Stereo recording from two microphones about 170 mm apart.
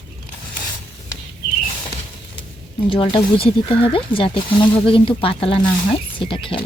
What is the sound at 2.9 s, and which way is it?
Speech, 30° left (ahead or behind).